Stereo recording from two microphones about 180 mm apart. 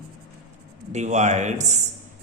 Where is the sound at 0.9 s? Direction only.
40° right (ahead or behind).